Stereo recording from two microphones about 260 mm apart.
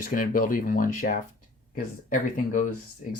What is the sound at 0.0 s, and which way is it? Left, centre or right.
Speech, left.